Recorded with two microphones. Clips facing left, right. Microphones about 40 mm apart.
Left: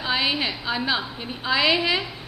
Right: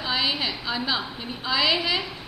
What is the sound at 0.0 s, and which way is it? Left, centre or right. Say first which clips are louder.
A woman's voice: left 2 dB; centre.